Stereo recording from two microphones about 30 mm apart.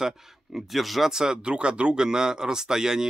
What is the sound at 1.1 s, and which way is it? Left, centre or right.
Speech, right.